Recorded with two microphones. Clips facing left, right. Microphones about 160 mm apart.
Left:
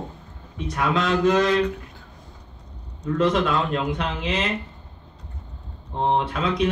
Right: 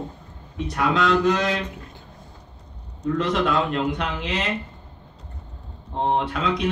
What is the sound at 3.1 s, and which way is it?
Speech, 50° left (ahead or behind).